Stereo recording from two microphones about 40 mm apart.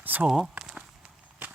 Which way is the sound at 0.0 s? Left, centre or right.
Right.